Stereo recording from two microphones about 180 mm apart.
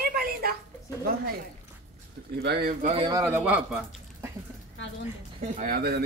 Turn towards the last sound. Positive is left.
turn(degrees=-60)  # may be behind; listen again after turning